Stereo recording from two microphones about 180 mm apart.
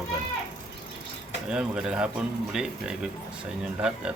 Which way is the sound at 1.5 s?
5° right (ahead or behind).